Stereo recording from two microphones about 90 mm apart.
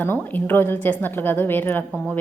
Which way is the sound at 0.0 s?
25° left (ahead or behind).